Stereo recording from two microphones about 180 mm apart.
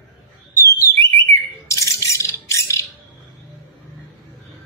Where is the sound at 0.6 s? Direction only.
15° left (ahead or behind).